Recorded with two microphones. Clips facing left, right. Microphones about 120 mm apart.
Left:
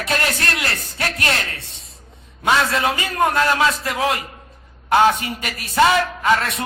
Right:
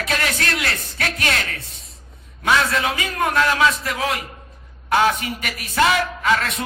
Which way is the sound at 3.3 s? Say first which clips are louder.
Right 1 dB; 35° left (ahead or behind).